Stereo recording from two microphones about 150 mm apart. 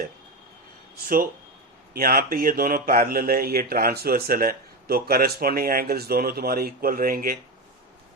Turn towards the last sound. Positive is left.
turn(degrees=-75)  # may be behind; listen again after turning